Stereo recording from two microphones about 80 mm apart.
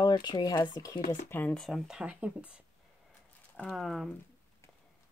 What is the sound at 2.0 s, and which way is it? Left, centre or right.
Speech, centre.